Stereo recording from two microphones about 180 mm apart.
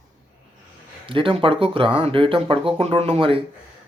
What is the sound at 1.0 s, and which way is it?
Speech, 30° right (ahead or behind).